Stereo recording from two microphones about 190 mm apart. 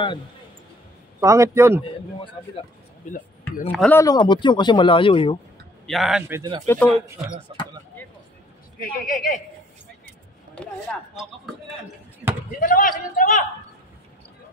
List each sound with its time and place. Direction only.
1.2 s a man's voice: 15° right (ahead or behind)
2.1 s speech: 25° left (ahead or behind)
3.6 s speech: 5° left (ahead or behind)
4.0 s speech: 20° left (ahead or behind)
5.9 s a man's voice: centre (ahead or behind)
6.7 s speech: 5° left (ahead or behind)
7.5 s speech: 25° right (ahead or behind)
8.8 s speech: 45° left (ahead or behind)
10.5 s speech: 5° left (ahead or behind)
12.5 s speech: 45° left (ahead or behind)